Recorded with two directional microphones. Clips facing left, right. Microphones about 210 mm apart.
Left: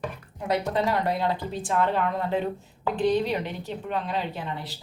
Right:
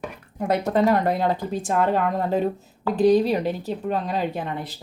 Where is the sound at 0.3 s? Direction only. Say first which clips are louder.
Right 5 dB; 50° right (ahead or behind).